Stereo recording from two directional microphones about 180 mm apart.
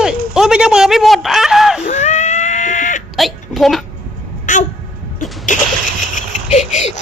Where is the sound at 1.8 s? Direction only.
40° left (ahead or behind).